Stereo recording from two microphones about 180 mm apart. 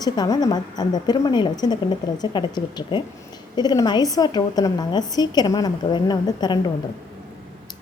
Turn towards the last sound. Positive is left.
turn(degrees=25)  # may be behind; listen again after turning